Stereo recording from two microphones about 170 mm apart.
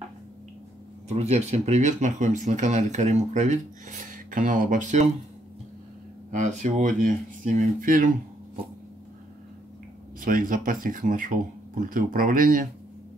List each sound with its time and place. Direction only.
1.0 s speech: 40° right (ahead or behind)
4.0 s speech: 50° right (ahead or behind)
6.3 s speech: 45° right (ahead or behind)
10.2 s speech: 55° right (ahead or behind)